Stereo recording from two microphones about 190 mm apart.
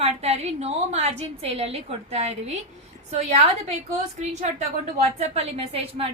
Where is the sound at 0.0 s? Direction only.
35° right (ahead or behind).